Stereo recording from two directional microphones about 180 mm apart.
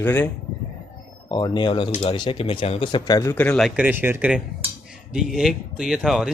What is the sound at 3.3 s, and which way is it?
Speech, 5° left (ahead or behind).